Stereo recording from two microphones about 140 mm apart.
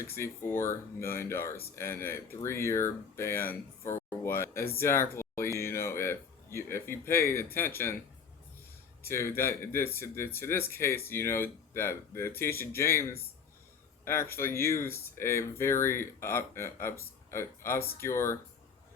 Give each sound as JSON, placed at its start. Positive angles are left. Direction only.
{"t": 0.1, "sound": "speech", "side_deg": 15}
{"t": 9.0, "sound": "speech", "side_deg": 15}